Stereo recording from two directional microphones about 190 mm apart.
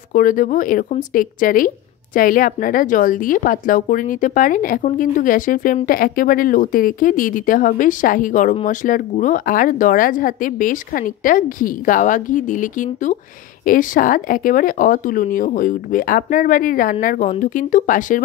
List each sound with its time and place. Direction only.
0.1 s a woman's voice: 45° left (ahead or behind)